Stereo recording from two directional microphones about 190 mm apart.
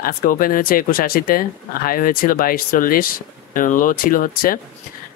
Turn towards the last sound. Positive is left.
turn(degrees=50)  # may be behind; listen again after turning